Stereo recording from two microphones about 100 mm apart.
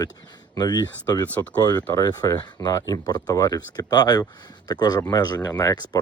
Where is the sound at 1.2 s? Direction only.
15° left (ahead or behind).